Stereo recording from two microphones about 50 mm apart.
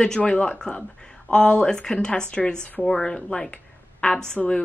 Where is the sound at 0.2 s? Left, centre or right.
Centre.